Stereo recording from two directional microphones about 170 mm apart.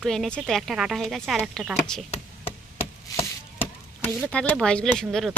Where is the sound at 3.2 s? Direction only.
15° left (ahead or behind).